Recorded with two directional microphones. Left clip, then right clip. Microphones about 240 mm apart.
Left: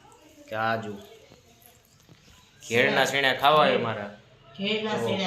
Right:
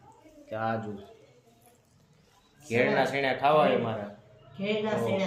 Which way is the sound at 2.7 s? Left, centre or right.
Centre.